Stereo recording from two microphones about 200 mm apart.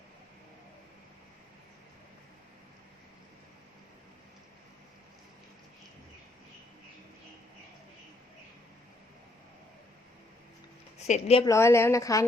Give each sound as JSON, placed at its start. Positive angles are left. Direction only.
{"t": 11.0, "sound": "a woman's voice", "side_deg": 30}
{"t": 11.4, "sound": "a woman's voice", "side_deg": 15}